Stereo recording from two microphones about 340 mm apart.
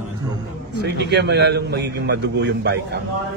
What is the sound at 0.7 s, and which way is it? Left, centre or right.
A man's voice, right.